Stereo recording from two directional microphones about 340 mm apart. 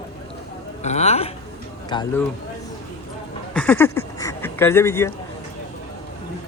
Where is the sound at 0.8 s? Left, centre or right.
Centre.